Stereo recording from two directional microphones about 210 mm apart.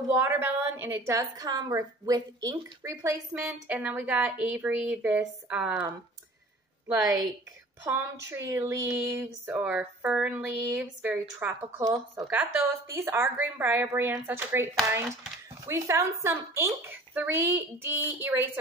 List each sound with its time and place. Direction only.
0.1 s speech: 10° right (ahead or behind)